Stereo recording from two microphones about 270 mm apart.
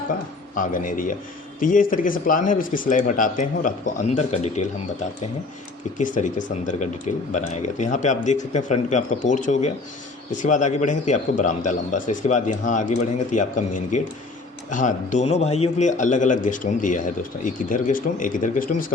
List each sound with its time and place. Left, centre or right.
0.5 s a man's voice: left
6.0 s a man's voice: left